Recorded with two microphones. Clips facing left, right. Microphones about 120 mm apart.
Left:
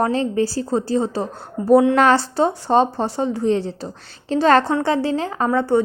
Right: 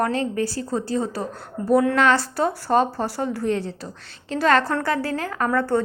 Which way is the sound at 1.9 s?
40° left (ahead or behind).